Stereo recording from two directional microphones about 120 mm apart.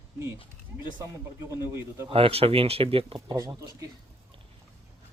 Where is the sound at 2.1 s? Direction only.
50° right (ahead or behind).